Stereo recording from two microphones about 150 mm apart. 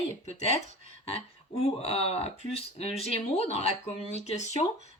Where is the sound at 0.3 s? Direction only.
45° left (ahead or behind).